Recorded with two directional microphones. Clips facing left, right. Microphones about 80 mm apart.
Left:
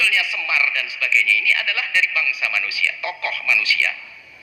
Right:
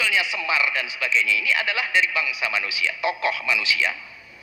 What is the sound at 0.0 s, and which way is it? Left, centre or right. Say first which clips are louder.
A man's voice: left 1 dB; right.